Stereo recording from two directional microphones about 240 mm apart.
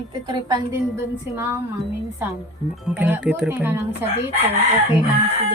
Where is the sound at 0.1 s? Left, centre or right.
Centre.